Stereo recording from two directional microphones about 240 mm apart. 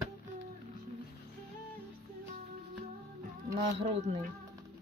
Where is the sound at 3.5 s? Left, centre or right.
Right.